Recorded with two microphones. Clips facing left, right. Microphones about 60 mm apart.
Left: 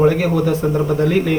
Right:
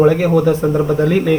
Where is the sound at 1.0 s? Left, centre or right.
Centre.